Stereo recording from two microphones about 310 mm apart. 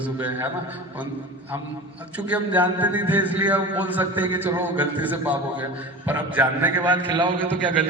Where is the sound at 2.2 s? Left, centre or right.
Centre.